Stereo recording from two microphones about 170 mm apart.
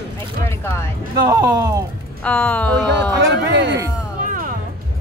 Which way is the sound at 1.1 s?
25° right (ahead or behind).